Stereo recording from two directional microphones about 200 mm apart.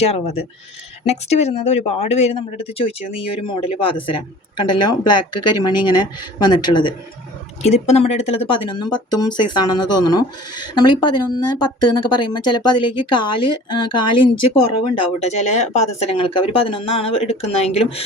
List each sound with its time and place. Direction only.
0.0 s speech: 30° left (ahead or behind)
7.6 s speech: 35° left (ahead or behind)
14.9 s speech: 35° left (ahead or behind)